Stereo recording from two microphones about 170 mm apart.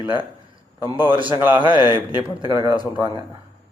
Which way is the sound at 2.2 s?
25° right (ahead or behind).